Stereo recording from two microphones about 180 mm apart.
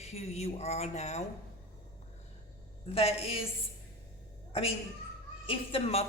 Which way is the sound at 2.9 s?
35° left (ahead or behind).